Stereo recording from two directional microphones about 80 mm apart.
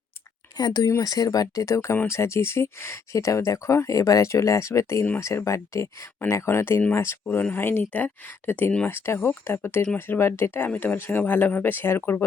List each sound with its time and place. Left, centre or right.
0.5 s speech: left
0.9 s speech: left
9.8 s speech: centre
10.2 s speech: left